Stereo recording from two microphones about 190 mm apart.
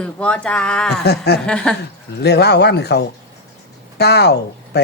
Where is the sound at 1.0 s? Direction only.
60° left (ahead or behind).